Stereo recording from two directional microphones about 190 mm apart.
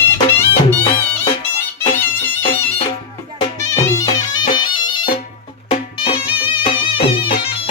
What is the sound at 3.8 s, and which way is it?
Music, 15° left (ahead or behind).